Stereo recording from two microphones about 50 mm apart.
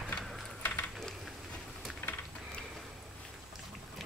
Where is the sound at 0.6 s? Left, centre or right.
Left.